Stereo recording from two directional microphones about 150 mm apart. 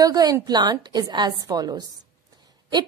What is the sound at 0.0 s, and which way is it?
A woman's voice, 25° right (ahead or behind).